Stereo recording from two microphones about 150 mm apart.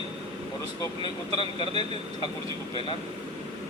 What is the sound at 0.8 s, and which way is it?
Speech, 30° left (ahead or behind).